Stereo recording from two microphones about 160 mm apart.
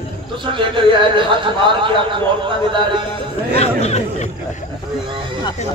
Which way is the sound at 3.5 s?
40° left (ahead or behind).